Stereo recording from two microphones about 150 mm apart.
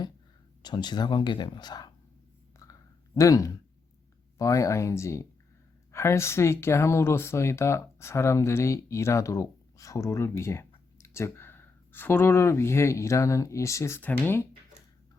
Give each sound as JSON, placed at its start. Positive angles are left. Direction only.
{"t": 0.6, "sound": "speech", "side_deg": 30}
{"t": 3.2, "sound": "speech", "side_deg": 20}